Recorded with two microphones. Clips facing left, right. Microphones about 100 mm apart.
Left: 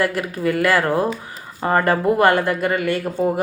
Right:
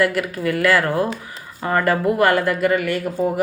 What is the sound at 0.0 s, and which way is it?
A woman's voice, 20° left (ahead or behind).